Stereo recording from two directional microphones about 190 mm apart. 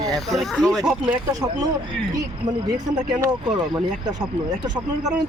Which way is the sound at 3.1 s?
20° right (ahead or behind).